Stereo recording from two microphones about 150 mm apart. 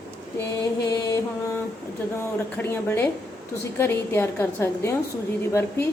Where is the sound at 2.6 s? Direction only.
15° left (ahead or behind).